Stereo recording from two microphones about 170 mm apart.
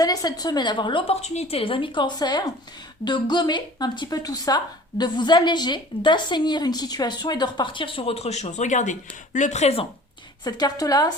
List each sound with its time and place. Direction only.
0.0 s speech: 20° left (ahead or behind); by 9.8 s 40° left (ahead or behind)
10.4 s speech: 20° left (ahead or behind)